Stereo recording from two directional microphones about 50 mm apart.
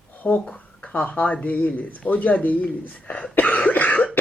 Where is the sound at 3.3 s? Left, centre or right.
Left.